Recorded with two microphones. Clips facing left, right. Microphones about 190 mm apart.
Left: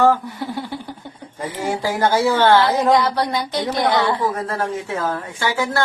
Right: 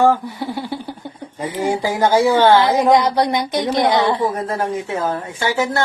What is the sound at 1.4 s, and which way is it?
Speech, 20° right (ahead or behind).